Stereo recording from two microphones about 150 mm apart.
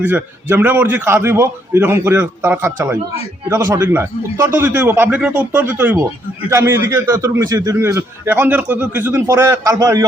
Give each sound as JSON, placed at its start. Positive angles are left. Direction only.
{"t": 0.0, "sound": "a man's voice", "side_deg": -15}